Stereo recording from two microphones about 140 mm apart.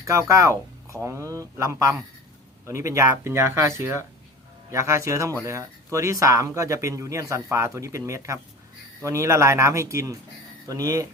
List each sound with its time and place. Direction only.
0.0 s speech: 20° right (ahead or behind)